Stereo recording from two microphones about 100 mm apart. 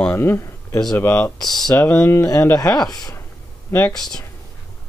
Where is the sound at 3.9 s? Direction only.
5° left (ahead or behind).